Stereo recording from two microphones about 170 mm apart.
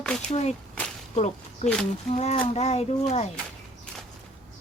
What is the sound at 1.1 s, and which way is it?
A child's voice, 40° left (ahead or behind).